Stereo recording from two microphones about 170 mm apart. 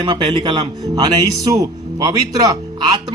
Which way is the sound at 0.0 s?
25° right (ahead or behind).